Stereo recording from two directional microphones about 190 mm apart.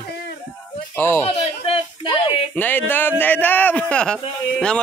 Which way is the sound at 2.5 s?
10° left (ahead or behind).